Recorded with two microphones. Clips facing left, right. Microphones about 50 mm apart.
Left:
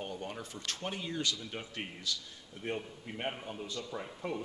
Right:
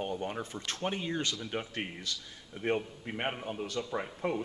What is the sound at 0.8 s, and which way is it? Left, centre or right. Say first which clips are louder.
A man's voice: right 3 dB; right.